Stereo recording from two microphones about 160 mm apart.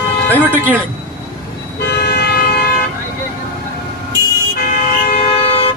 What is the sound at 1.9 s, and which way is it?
Vehicle, 90° left.